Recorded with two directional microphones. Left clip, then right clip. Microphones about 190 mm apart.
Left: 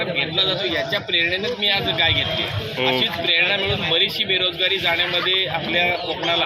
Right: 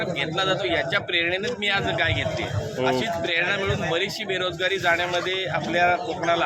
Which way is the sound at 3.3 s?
10° left (ahead or behind).